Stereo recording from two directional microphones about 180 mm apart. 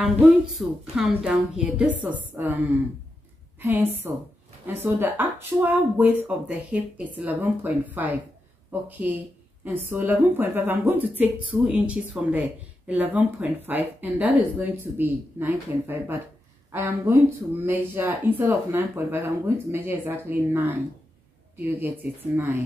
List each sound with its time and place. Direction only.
0.6 s a woman's voice: centre (ahead or behind)
3.6 s a woman's voice: 10° right (ahead or behind)